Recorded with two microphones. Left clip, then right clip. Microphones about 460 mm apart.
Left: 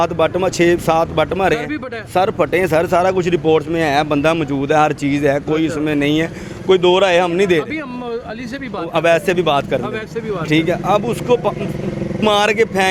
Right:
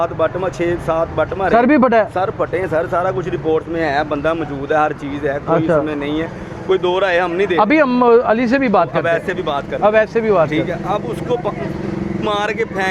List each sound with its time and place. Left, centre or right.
0.0 s speech: left
1.7 s speech: right
2.1 s speech: left
6.7 s speech: left
7.6 s speech: right
9.0 s speech: left
9.8 s speech: right
10.5 s speech: left